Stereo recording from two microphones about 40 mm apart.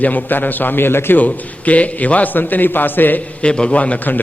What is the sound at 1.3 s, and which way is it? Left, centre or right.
A man's voice, left.